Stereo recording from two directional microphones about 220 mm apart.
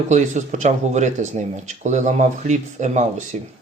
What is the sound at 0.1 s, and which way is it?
Speech, 30° right (ahead or behind).